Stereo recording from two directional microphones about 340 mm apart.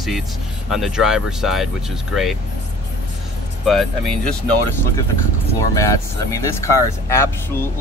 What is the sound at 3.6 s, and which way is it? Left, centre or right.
Speech, centre.